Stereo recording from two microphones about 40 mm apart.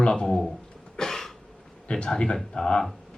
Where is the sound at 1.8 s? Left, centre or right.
Left.